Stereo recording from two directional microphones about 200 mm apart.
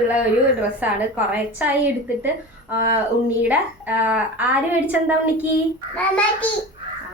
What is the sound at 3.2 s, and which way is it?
A woman's voice, 10° right (ahead or behind).